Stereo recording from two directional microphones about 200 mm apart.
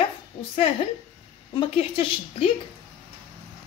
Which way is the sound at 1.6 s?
25° left (ahead or behind).